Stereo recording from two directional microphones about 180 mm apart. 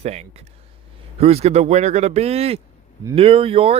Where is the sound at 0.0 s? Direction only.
35° right (ahead or behind).